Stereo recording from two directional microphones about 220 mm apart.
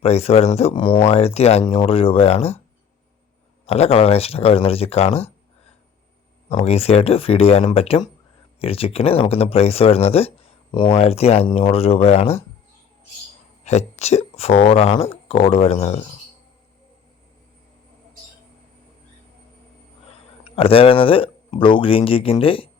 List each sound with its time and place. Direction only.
0.0 s speech: 30° left (ahead or behind)
3.7 s speech: 25° left (ahead or behind)
6.5 s speech: 25° left (ahead or behind)
13.7 s speech: 30° left (ahead or behind)
20.1 s speech: 25° left (ahead or behind)